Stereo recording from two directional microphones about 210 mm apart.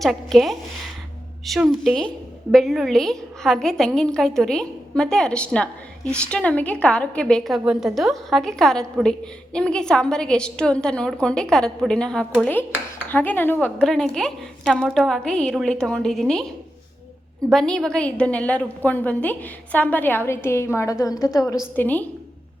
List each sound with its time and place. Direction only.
0.0 s a woman's voice: centre (ahead or behind)
17.5 s a woman's voice: centre (ahead or behind)